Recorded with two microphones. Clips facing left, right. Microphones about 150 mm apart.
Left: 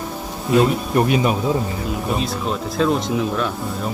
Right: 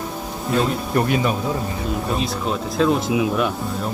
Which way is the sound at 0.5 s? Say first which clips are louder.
Left 4 dB; 15° left (ahead or behind).